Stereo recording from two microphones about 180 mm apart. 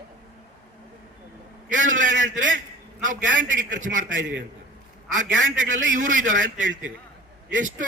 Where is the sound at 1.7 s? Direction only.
45° right (ahead or behind).